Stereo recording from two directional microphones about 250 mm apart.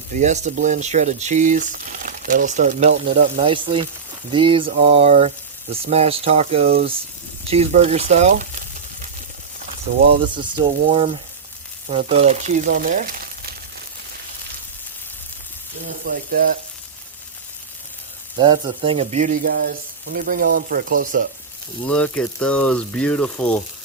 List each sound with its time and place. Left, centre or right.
0.1 s speech: right
10.9 s speech: right
16.0 s speech: right
18.3 s speech: centre; by 21.2 s right
21.8 s speech: centre